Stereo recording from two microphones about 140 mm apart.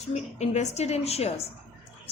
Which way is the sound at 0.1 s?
50° left (ahead or behind).